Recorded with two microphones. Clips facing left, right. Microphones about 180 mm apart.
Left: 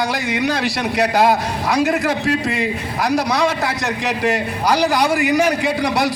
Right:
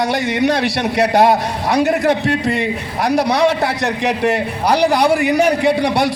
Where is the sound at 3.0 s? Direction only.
30° right (ahead or behind).